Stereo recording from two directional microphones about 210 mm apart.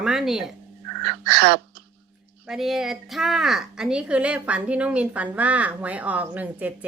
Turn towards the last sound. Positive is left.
turn(degrees=-5)  # may be behind; listen again after turning